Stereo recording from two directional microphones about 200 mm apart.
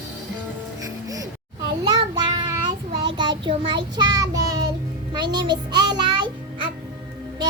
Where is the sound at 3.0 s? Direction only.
25° right (ahead or behind).